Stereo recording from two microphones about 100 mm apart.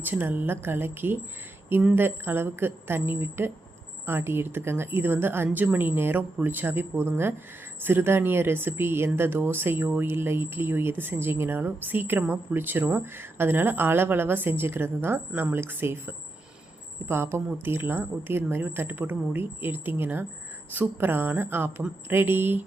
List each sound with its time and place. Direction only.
0.0 s speech: 20° right (ahead or behind)